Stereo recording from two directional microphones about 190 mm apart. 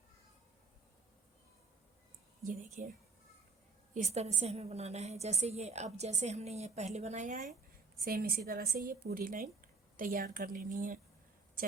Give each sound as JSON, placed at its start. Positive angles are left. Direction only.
{"t": 2.5, "sound": "a woman's voice", "side_deg": -40}
{"t": 3.9, "sound": "a woman's voice", "side_deg": -35}
{"t": 8.0, "sound": "speech", "side_deg": -50}